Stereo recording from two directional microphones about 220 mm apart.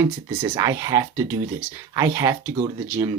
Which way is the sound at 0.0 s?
15° right (ahead or behind).